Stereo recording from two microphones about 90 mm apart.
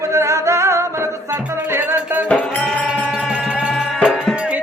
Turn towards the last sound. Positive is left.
turn(degrees=-10)  # may be behind; listen again after turning